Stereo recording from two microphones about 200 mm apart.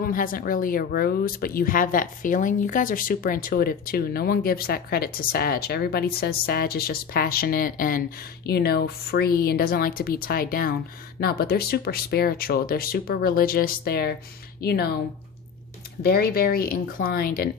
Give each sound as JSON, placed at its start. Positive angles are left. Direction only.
{"t": 0.0, "sound": "speech", "side_deg": 45}
{"t": 16.0, "sound": "speech", "side_deg": 50}